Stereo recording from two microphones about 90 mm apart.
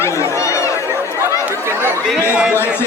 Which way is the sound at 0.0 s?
30° left (ahead or behind).